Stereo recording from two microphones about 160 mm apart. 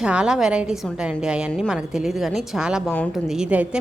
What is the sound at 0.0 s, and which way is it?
A woman's voice, 5° right (ahead or behind).